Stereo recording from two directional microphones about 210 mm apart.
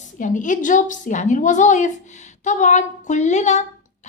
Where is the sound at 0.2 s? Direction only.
35° left (ahead or behind).